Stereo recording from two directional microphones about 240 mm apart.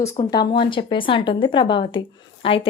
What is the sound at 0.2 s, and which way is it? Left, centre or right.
Speech, centre.